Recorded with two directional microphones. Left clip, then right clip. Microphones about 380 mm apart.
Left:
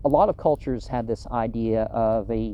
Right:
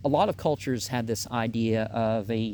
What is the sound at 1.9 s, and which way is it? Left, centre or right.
Speech, right.